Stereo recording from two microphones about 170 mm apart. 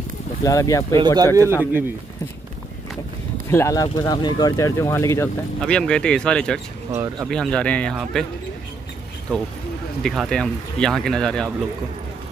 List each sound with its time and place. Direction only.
0.4 s speech: 20° left (ahead or behind)
0.9 s speech: 25° right (ahead or behind)
3.4 s speech: 15° left (ahead or behind)
5.6 s speech: 5° left (ahead or behind)
6.9 s speech: 15° right (ahead or behind)
7.2 s speech: 5° left (ahead or behind)
10.0 s speech: centre (ahead or behind)